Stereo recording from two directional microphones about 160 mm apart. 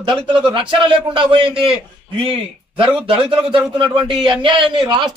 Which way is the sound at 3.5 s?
30° right (ahead or behind).